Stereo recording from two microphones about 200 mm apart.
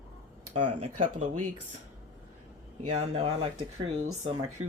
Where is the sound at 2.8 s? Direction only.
30° right (ahead or behind).